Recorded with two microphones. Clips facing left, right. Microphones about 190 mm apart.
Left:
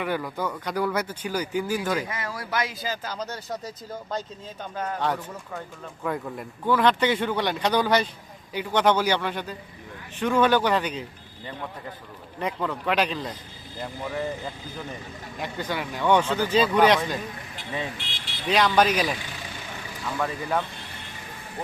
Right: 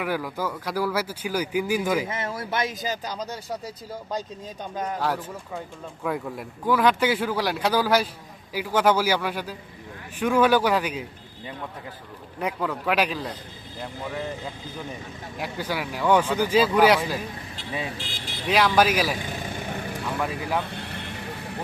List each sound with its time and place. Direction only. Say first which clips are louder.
0.0 s speech: even; 5° right (ahead or behind)
2.0 s speech: right 3 dB; 25° right (ahead or behind)
4.7 s speech: right 1 dB; 15° right (ahead or behind)
4.9 s speech: left 1 dB; 5° right (ahead or behind)
12.4 s speech: right 1 dB; 5° right (ahead or behind)
18.4 s speech: even; 5° right (ahead or behind)
19.3 s vehicle: right 7 dB; 50° right (ahead or behind)
20.1 s speech: left 1 dB; 5° right (ahead or behind)
20.7 s vehicle: right 7 dB; 70° right (ahead or behind)